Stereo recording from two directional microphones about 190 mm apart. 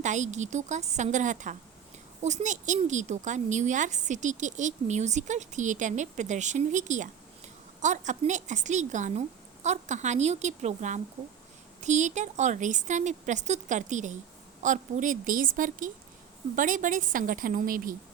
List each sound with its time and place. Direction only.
0.0 s a woman's voice: 40° right (ahead or behind)